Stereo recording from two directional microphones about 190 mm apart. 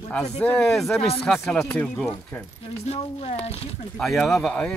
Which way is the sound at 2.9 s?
35° left (ahead or behind).